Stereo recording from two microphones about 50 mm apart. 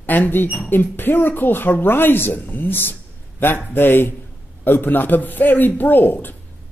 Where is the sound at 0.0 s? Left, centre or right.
Left.